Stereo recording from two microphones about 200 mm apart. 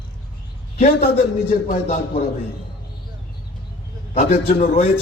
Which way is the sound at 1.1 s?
35° left (ahead or behind).